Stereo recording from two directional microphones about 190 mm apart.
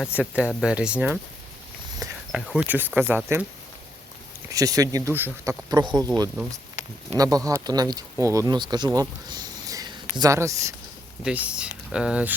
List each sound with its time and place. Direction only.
0.0 s speech: 5° right (ahead or behind)
2.3 s speech: 5° right (ahead or behind)
4.5 s speech: 15° right (ahead or behind)
6.8 s a sound: 40° left (ahead or behind)
7.1 s speech: 20° right (ahead or behind)
11.2 s speech: 5° right (ahead or behind)